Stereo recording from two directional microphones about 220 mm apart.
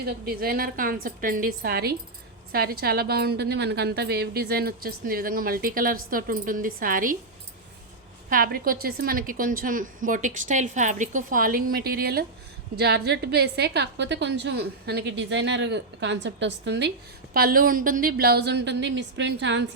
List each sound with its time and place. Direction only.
0.0 s a woman's voice: 45° right (ahead or behind)
8.3 s a woman's voice: 40° right (ahead or behind)
17.3 s a woman's voice: 40° right (ahead or behind)